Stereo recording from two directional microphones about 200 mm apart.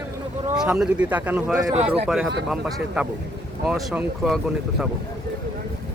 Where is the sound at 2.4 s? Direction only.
Centre (ahead or behind).